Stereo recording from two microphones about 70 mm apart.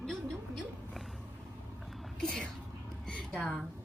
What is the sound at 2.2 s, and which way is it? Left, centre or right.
Whispering, centre.